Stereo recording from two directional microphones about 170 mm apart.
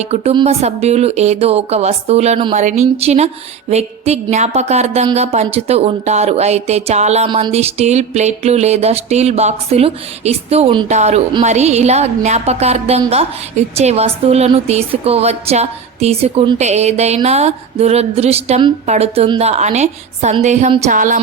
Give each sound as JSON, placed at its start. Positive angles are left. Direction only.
{"t": 0.0, "sound": "a woman's voice", "side_deg": -35}
{"t": 20.9, "sound": "music", "side_deg": -50}